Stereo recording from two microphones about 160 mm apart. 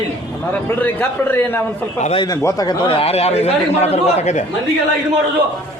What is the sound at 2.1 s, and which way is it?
A man's voice, 25° left (ahead or behind).